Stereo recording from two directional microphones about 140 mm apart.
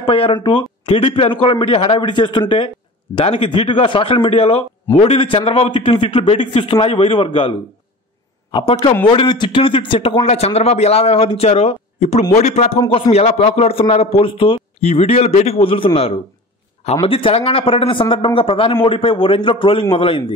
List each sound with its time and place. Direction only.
0.0 s a man's voice: 40° left (ahead or behind)
12.8 s a man's voice: 35° left (ahead or behind)
13.1 s a man's voice: 50° left (ahead or behind)